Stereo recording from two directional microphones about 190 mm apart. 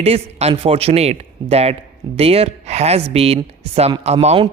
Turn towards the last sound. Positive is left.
turn(degrees=-35)  # may be behind; listen again after turning